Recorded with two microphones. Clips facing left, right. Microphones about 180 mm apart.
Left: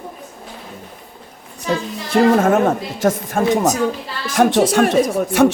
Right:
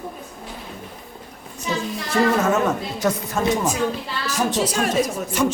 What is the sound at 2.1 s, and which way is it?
Speech, 55° left (ahead or behind).